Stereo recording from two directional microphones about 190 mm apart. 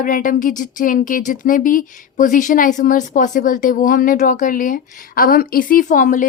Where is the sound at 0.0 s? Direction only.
45° left (ahead or behind).